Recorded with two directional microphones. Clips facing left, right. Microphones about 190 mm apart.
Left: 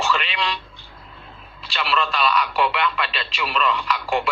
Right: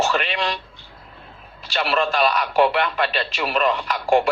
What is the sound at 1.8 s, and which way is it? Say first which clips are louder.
Speech: right 3 dB; 45° right (ahead or behind).